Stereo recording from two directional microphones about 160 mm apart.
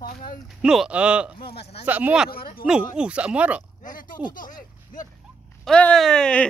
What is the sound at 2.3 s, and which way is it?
Speech, 65° left (ahead or behind).